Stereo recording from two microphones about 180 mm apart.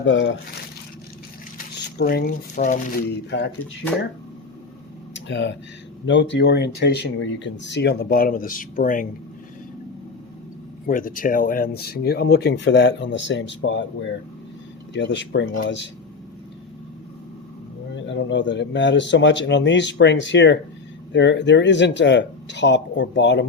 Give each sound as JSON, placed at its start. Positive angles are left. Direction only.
{"t": 0.0, "sound": "speech", "side_deg": 90}
{"t": 2.0, "sound": "speech", "side_deg": 60}
{"t": 3.2, "sound": "speech", "side_deg": 80}
{"t": 5.1, "sound": "speech", "side_deg": 80}
{"t": 10.8, "sound": "speech", "side_deg": 50}
{"t": 14.9, "sound": "speech", "side_deg": 80}
{"t": 17.9, "sound": "speech", "side_deg": 85}